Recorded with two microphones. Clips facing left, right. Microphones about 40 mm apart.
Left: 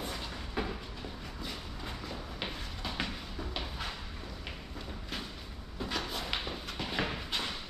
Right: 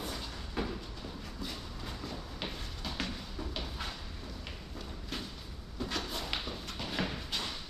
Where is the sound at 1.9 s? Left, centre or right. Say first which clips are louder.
Left 1 dB; centre.